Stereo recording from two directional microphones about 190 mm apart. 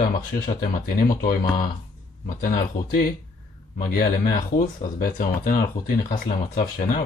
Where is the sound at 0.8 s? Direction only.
50° left (ahead or behind).